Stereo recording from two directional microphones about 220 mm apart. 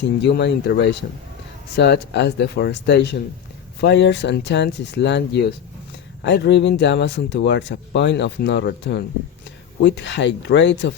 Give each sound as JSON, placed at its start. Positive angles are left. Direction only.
{"t": 0.2, "sound": "speech", "side_deg": 50}